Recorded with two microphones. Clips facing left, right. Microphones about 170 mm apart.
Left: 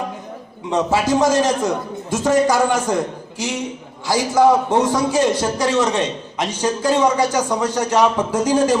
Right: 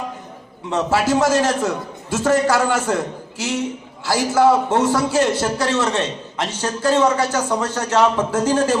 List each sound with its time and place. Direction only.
0.7 s a man's voice: 15° left (ahead or behind)